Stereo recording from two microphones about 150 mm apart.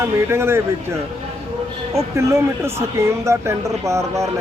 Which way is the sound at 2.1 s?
15° right (ahead or behind).